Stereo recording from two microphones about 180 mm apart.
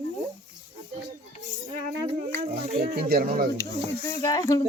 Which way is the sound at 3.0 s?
60° right (ahead or behind).